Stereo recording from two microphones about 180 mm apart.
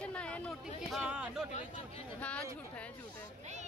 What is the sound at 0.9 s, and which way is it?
Speech, 5° right (ahead or behind).